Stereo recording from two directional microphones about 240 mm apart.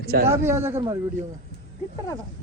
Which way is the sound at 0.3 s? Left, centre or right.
Centre.